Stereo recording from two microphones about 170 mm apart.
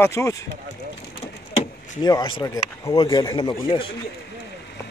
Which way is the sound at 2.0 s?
25° left (ahead or behind).